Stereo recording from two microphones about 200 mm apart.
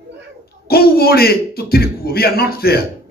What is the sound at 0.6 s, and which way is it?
A man's voice, 50° left (ahead or behind).